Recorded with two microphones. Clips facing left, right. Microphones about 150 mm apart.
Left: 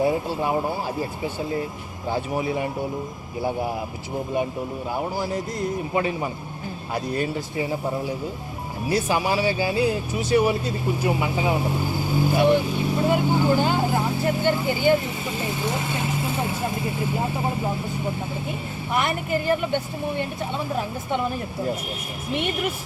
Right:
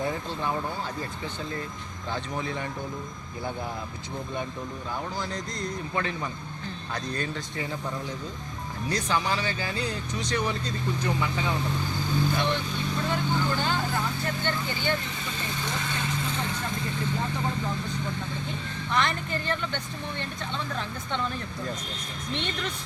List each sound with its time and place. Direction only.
0.0 s speech: 10° left (ahead or behind)
0.5 s speech: 35° left (ahead or behind)
0.9 s speech: 10° left (ahead or behind)
5.1 s speech: 10° left (ahead or behind)
8.9 s speech: 10° left (ahead or behind)